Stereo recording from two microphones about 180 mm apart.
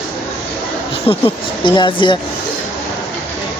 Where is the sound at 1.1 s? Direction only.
30° left (ahead or behind).